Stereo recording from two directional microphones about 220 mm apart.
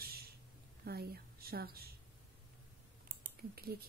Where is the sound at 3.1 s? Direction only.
40° right (ahead or behind).